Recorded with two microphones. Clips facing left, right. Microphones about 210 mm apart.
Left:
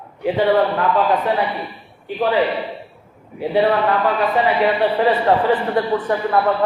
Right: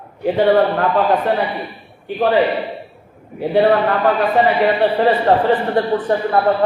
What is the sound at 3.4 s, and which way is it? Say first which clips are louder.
A man's voice: right 3 dB; 55° right (ahead or behind).